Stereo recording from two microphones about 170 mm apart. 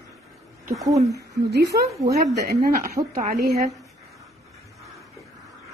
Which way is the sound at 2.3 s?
65° right (ahead or behind).